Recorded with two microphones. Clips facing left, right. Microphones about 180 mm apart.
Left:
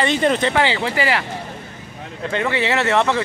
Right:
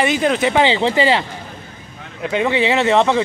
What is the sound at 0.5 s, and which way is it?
Speech, 20° right (ahead or behind).